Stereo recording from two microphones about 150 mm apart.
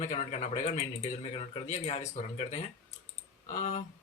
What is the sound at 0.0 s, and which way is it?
Speech, 50° left (ahead or behind).